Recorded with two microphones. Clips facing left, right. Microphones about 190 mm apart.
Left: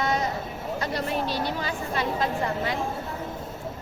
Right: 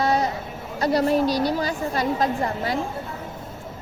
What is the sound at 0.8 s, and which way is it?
A woman's voice, 35° right (ahead or behind).